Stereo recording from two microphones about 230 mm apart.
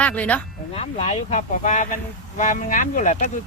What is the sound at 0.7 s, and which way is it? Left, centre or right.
Speech, left.